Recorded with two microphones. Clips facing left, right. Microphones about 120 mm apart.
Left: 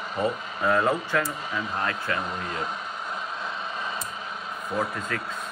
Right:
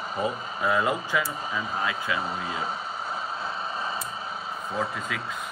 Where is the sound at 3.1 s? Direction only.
35° right (ahead or behind).